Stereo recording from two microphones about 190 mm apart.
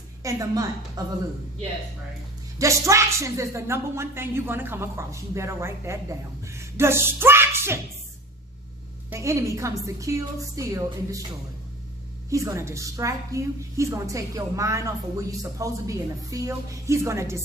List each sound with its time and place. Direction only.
0.2 s a woman's voice: 15° right (ahead or behind)
2.6 s a woman's voice: 15° right (ahead or behind)
9.0 s a woman's voice: 15° right (ahead or behind)
12.3 s a woman's voice: 15° right (ahead or behind)